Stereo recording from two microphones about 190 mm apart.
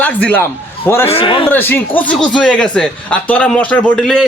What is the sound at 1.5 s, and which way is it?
Speech, 10° left (ahead or behind).